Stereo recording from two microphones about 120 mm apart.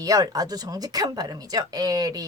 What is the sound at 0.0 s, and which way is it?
Speech, 30° right (ahead or behind).